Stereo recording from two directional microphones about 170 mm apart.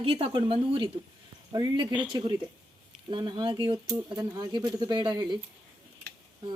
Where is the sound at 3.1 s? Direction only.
25° right (ahead or behind).